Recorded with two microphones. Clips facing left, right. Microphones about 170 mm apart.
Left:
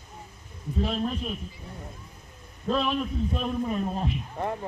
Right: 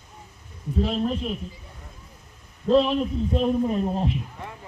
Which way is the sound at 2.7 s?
30° right (ahead or behind).